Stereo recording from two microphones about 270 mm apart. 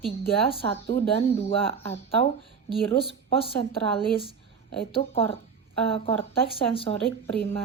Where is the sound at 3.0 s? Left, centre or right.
Centre.